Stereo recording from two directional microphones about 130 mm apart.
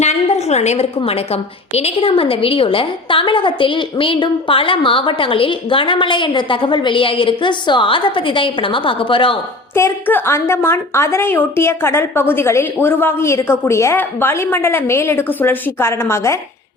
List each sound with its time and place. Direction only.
0.0 s a woman's voice: 60° left (ahead or behind); by 9.4 s 40° left (ahead or behind)
9.7 s a woman's voice: 15° left (ahead or behind)